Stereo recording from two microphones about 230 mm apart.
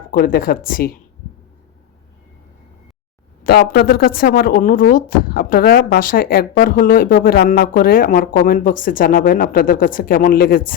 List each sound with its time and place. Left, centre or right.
0.1 s speech: left
3.4 s speech: left